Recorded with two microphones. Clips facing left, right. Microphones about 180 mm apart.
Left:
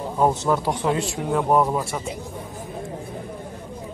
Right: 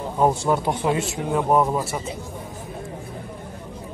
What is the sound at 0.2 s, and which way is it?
A man's voice, 10° right (ahead or behind).